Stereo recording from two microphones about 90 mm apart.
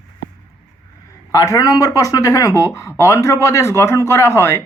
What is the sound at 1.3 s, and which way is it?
Speech, 40° left (ahead or behind).